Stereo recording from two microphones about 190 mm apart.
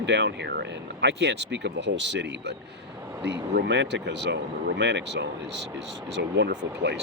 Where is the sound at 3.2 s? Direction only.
60° right (ahead or behind).